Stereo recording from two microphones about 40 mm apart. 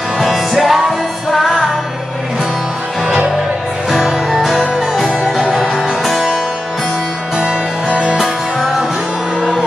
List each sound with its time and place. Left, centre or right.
0.2 s music: centre
3.9 s music: centre
5.2 s music: centre
7.9 s music: left